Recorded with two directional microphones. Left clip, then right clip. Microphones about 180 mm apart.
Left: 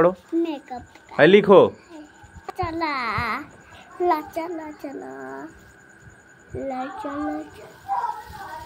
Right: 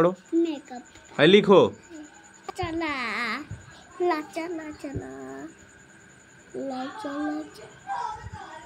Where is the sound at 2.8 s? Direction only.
15° right (ahead or behind).